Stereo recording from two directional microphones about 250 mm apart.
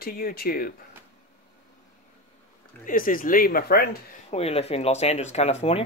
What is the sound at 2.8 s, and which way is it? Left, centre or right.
Speech, left.